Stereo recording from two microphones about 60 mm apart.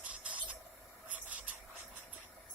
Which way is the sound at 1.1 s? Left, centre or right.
Right.